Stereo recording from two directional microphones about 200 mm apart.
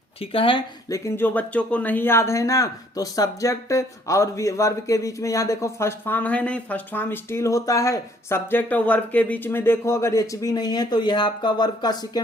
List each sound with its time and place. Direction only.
0.2 s speech: 25° left (ahead or behind)